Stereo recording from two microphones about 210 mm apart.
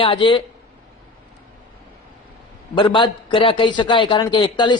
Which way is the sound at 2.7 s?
25° left (ahead or behind).